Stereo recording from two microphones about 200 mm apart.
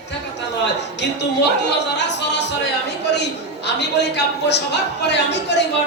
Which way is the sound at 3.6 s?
60° left (ahead or behind).